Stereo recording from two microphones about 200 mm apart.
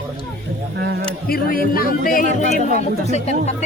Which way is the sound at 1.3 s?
45° left (ahead or behind).